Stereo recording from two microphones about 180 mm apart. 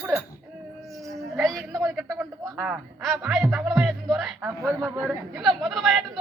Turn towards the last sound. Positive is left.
turn(degrees=0)  # may be behind; listen again after turning